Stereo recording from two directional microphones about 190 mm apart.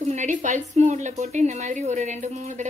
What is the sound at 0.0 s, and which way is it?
A woman's voice, 40° right (ahead or behind).